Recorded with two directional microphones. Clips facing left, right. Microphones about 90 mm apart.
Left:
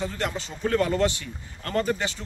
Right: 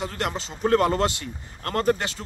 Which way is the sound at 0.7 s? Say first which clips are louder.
Right 3 dB; 40° right (ahead or behind).